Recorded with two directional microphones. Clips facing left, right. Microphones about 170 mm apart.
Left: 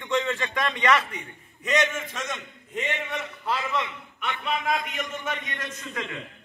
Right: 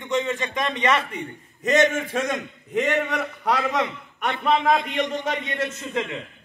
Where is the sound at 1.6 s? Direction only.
50° right (ahead or behind); by 3.6 s 70° right (ahead or behind).